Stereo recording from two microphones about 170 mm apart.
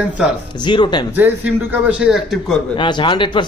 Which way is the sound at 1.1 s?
10° right (ahead or behind).